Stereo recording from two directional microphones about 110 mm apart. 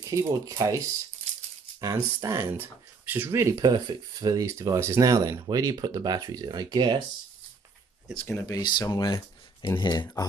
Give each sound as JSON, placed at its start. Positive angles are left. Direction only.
{"t": 0.0, "sound": "speech", "side_deg": -30}
{"t": 8.3, "sound": "speech", "side_deg": 35}